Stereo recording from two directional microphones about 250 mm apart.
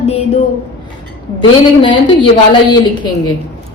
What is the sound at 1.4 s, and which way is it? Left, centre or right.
Speech, centre.